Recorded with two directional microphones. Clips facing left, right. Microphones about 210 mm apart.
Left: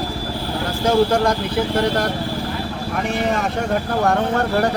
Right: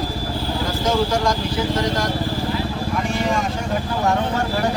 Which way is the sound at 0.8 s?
60° left (ahead or behind).